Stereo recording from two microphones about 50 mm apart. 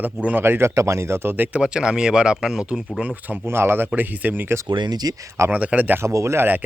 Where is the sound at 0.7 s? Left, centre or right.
Right.